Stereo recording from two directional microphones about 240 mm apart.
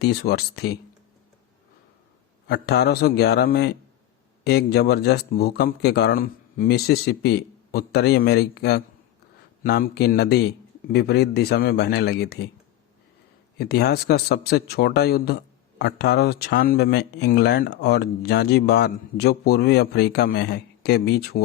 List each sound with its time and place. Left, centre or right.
0.0 s speech: left
2.5 s a man's voice: left
13.6 s a man's voice: left